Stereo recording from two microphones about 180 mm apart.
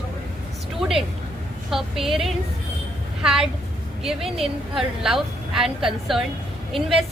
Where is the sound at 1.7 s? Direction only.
Centre (ahead or behind).